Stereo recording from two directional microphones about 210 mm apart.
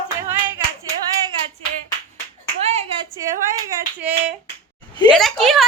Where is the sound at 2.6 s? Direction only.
30° right (ahead or behind).